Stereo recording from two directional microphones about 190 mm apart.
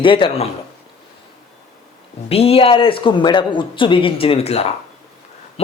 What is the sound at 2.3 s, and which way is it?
Speech, 30° left (ahead or behind).